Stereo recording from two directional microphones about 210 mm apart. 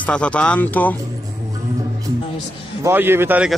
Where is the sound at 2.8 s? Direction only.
10° right (ahead or behind).